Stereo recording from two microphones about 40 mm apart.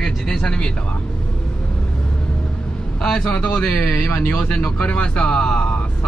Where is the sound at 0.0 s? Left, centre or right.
Centre.